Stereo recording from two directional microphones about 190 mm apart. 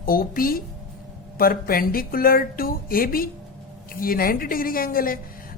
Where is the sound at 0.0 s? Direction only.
50° left (ahead or behind).